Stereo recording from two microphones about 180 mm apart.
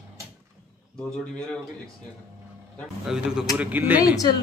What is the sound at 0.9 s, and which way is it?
Speech, 5° left (ahead or behind).